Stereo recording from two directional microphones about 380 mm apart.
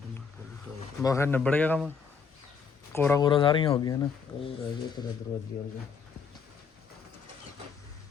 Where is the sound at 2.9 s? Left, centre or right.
Centre.